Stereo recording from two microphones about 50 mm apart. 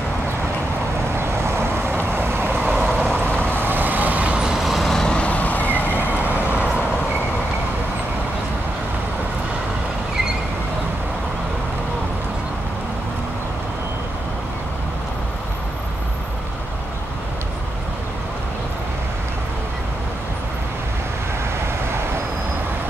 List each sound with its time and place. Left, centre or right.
1.1 s vehicle: right
2.7 s vehicle: centre
3.3 s vehicle: left
3.5 s vehicle: right
4.4 s vehicle: centre
5.0 s vehicle: left
6.3 s vehicle: right